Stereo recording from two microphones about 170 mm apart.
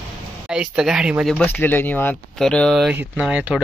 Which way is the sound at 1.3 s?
10° left (ahead or behind).